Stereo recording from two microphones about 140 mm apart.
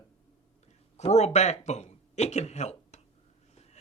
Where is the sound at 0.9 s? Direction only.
55° left (ahead or behind).